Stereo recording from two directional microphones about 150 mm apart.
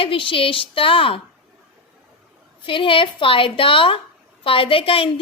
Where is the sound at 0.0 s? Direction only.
35° left (ahead or behind).